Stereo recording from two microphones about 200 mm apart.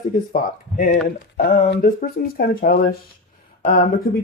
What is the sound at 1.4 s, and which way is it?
Speech, 45° left (ahead or behind).